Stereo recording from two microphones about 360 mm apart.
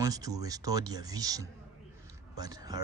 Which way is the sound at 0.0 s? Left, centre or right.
Centre.